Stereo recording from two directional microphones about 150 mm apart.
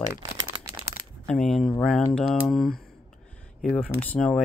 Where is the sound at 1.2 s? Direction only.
5° left (ahead or behind).